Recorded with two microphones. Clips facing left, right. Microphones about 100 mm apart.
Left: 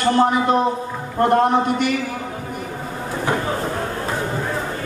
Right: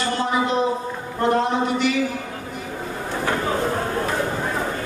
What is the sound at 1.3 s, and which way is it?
Speech, 50° left (ahead or behind).